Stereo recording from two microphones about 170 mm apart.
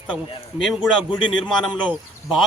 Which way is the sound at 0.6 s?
Centre (ahead or behind).